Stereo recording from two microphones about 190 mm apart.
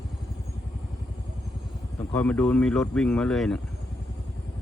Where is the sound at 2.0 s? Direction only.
5° left (ahead or behind).